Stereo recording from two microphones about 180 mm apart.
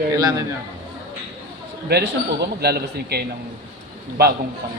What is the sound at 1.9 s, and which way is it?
A man's voice, 65° right (ahead or behind).